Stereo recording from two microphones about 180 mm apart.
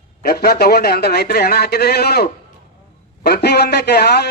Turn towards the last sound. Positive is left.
turn(degrees=65)  # may be behind; listen again after turning